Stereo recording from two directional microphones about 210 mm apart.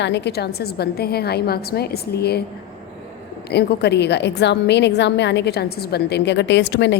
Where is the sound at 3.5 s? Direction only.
50° left (ahead or behind).